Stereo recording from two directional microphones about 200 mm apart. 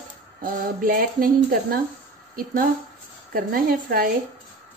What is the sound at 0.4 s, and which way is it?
A woman's voice, 45° right (ahead or behind).